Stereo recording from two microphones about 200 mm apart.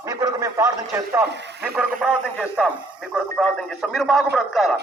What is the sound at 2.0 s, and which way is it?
Speech, 5° right (ahead or behind).